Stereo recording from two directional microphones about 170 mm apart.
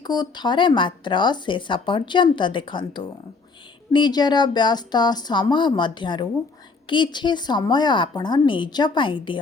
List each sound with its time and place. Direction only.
0.0 s speech: 25° left (ahead or behind)